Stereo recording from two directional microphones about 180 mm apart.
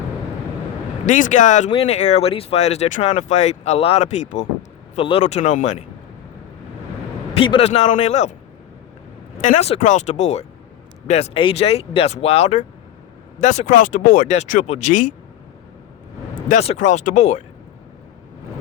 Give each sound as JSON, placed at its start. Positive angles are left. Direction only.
{"t": 1.0, "sound": "speech", "side_deg": 45}
{"t": 7.3, "sound": "speech", "side_deg": 30}
{"t": 9.4, "sound": "speech", "side_deg": 40}
{"t": 16.5, "sound": "speech", "side_deg": 40}